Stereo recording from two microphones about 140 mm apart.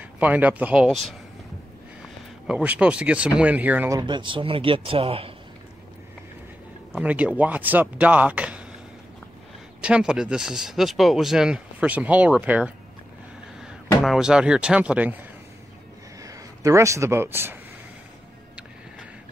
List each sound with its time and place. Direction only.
0.0 s speech: 10° right (ahead or behind)
0.8 s speech: centre (ahead or behind)
2.4 s speech: 5° right (ahead or behind)
3.9 s speech: 35° right (ahead or behind)
6.9 s speech: 10° right (ahead or behind)
9.8 s speech: 5° right (ahead or behind)
14.0 s speech: 5° right (ahead or behind)
16.2 s speech: 25° right (ahead or behind)